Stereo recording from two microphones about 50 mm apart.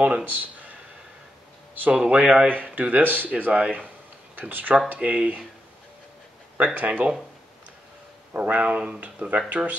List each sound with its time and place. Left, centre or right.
0.0 s speech: right
2.0 s speech: centre
2.4 s speech: right
6.6 s speech: right
8.4 s speech: right